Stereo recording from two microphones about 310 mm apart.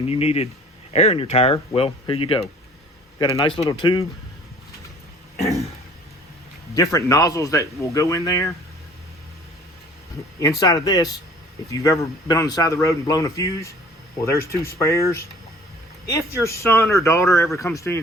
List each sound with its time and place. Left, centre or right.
0.1 s speech: centre
6.7 s speech: centre
10.4 s speech: centre
14.8 s speech: centre